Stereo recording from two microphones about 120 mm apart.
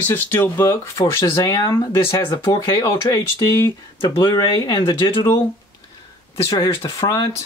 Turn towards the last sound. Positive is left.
turn(degrees=35)  # may be behind; listen again after turning